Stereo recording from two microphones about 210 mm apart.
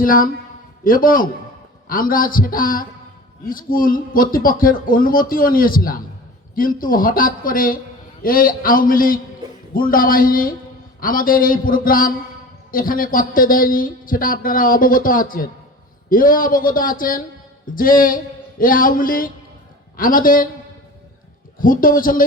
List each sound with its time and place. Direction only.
0.0 s speech: 40° left (ahead or behind)
21.6 s speech: 40° left (ahead or behind)